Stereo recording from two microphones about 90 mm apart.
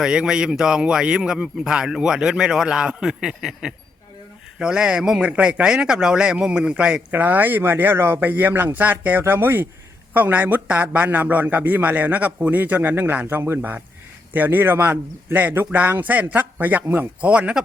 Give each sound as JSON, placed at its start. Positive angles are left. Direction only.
{"t": 0.0, "sound": "a man's voice", "side_deg": -10}